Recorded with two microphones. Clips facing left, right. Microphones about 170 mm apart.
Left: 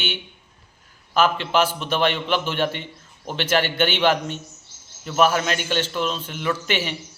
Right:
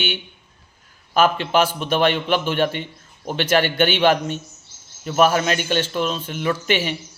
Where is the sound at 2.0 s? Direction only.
50° right (ahead or behind).